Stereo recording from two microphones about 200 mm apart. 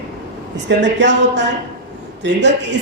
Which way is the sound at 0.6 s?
60° right (ahead or behind).